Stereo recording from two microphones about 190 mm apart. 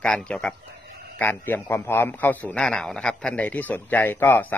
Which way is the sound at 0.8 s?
55° right (ahead or behind).